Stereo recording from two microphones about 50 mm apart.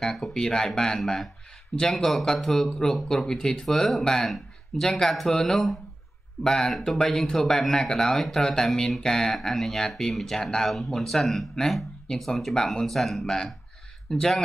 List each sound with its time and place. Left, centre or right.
0.0 s speech: centre